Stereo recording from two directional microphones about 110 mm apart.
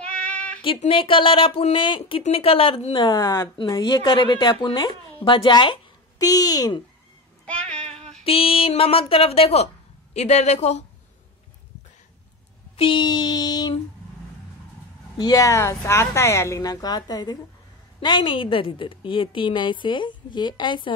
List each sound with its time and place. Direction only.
0.0 s female singing: 10° left (ahead or behind)
0.7 s a woman's voice: 55° left (ahead or behind)
6.1 s a woman's voice: 35° left (ahead or behind)
7.4 s child singing: 10° left (ahead or behind)
8.2 s a woman's voice: 60° left (ahead or behind)
10.1 s speech: 85° left
12.7 s a sound: 50° left (ahead or behind)
15.1 s a woman's voice: 35° left (ahead or behind)